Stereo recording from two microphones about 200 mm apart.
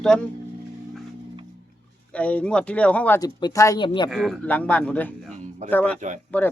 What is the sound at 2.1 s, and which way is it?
Speech, 5° left (ahead or behind).